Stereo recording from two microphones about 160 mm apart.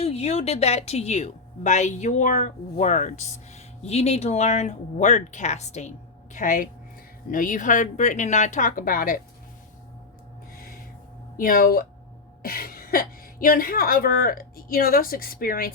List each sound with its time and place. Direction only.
0.0 s a woman's voice: 40° left (ahead or behind)
6.3 s a woman's voice: 55° left (ahead or behind)
11.3 s a woman's voice: 60° left (ahead or behind)